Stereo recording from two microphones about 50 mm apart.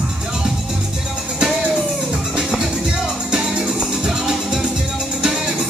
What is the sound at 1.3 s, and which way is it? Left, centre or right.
Music, centre.